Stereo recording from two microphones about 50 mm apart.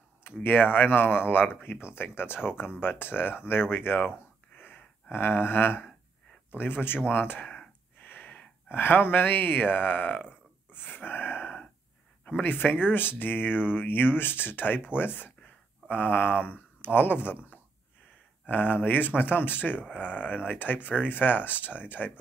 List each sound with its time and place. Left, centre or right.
0.4 s speech: left
4.6 s gasp: left
5.1 s speech: left
10.7 s a sound: left
12.4 s speech: left
18.4 s speech: left